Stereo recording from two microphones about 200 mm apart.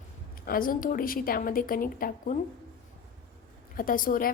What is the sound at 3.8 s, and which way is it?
Speech, 45° left (ahead or behind).